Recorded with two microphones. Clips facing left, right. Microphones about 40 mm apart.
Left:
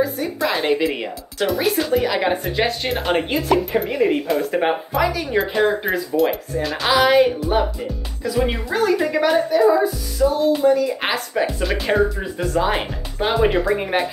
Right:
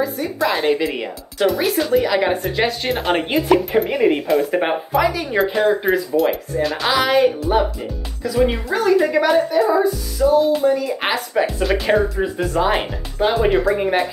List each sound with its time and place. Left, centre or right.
0.0 s speech: centre
3.3 s speech: centre
13.2 s speech: centre